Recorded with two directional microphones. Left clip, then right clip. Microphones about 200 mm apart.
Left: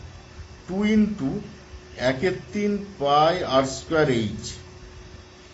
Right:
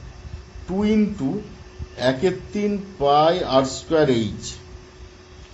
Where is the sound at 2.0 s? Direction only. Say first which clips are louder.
Right 3 dB; 20° right (ahead or behind).